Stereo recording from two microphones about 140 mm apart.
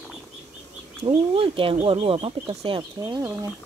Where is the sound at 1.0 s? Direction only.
40° right (ahead or behind).